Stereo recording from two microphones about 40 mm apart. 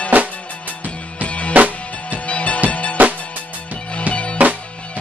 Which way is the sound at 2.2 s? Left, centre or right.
Left.